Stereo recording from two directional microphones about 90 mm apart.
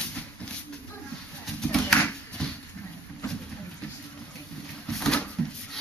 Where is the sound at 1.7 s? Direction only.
10° left (ahead or behind).